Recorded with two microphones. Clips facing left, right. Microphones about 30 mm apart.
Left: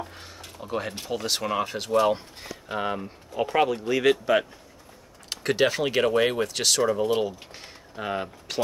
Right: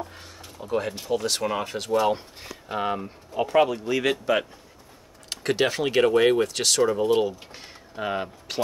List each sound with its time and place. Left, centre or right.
0.1 s a sound: centre
0.7 s speech: centre
0.9 s speech: left
1.2 s speech: centre